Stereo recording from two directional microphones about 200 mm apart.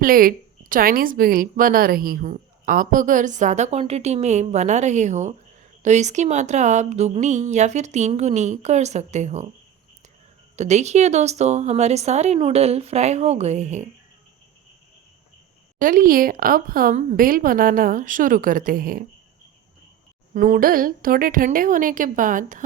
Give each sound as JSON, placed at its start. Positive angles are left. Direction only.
{"t": 0.0, "sound": "a woman's voice", "side_deg": -45}
{"t": 10.6, "sound": "a woman's voice", "side_deg": -35}
{"t": 15.8, "sound": "a woman's voice", "side_deg": -45}
{"t": 20.3, "sound": "a woman's voice", "side_deg": -40}